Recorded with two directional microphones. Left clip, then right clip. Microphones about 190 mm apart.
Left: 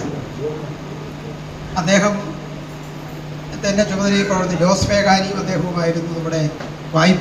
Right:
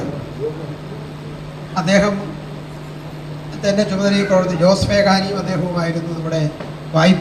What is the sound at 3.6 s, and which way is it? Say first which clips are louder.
A man's voice: right 1 dB; 30° right (ahead or behind).